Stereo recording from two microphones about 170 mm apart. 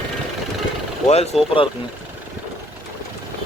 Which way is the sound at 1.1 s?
40° left (ahead or behind).